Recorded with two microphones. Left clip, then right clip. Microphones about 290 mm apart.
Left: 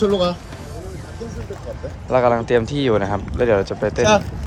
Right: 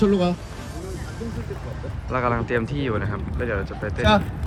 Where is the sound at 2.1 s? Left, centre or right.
Centre.